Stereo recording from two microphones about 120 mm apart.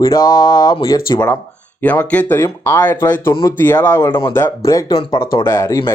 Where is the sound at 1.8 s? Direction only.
10° left (ahead or behind).